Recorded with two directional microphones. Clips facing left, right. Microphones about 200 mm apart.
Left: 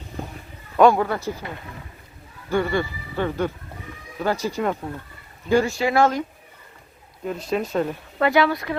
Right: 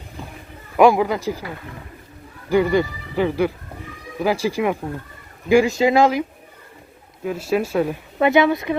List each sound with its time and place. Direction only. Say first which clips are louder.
0.8 s speech: right 2 dB; 10° right (ahead or behind)
2.5 s speech: right 5 dB; 15° right (ahead or behind)
7.3 s speech: right 4 dB; 5° right (ahead or behind)
8.2 s speech: right 3 dB; 20° right (ahead or behind)